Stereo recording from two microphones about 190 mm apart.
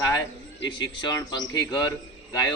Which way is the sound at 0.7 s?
25° left (ahead or behind).